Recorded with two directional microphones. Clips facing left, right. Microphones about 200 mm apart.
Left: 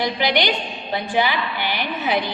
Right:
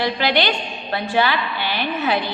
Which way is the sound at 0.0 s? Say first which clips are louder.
Right 1 dB; 15° left (ahead or behind).